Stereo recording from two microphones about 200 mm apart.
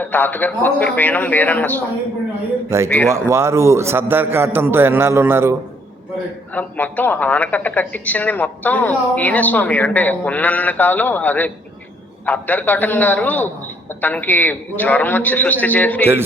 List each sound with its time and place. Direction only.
0.0 s a woman's voice: 10° left (ahead or behind)
2.6 s a man's voice: 15° right (ahead or behind)
6.5 s a woman's voice: 10° left (ahead or behind)